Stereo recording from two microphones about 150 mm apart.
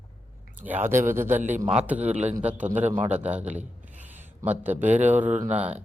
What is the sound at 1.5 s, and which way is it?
Speech, 50° right (ahead or behind).